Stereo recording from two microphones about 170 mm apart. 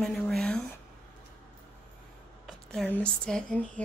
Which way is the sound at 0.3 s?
5° left (ahead or behind).